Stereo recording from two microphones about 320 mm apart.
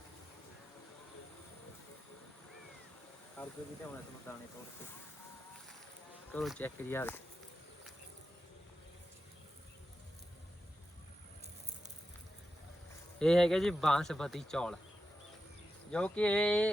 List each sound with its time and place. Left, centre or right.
3.4 s speech: centre
6.3 s speech: centre
13.1 s speech: centre
15.9 s speech: centre